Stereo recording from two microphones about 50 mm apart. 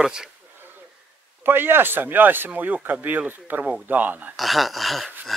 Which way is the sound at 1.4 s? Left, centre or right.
Right.